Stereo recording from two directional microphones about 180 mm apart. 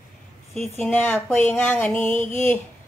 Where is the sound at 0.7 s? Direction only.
10° left (ahead or behind).